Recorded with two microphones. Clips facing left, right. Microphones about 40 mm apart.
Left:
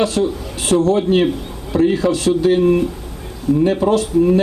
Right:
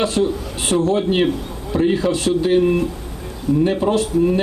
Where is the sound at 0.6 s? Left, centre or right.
Right.